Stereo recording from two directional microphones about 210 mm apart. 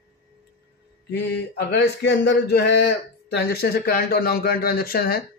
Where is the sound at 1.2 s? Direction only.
50° left (ahead or behind).